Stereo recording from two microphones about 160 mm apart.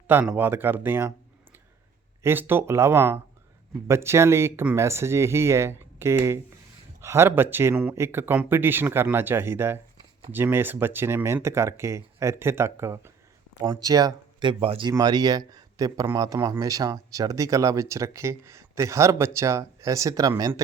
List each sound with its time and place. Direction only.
0.1 s speech: 10° right (ahead or behind)
2.2 s speech: 15° right (ahead or behind)